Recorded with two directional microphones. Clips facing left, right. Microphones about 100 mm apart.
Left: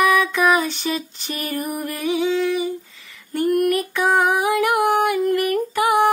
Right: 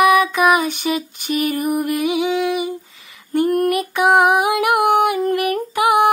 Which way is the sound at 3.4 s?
30° right (ahead or behind).